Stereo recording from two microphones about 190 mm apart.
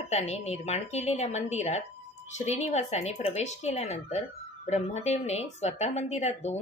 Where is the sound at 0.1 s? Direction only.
35° left (ahead or behind).